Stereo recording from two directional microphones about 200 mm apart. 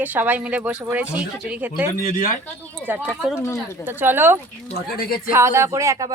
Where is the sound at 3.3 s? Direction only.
15° left (ahead or behind).